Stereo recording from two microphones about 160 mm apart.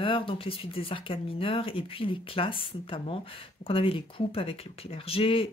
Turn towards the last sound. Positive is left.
turn(degrees=35)  # may be behind; listen again after turning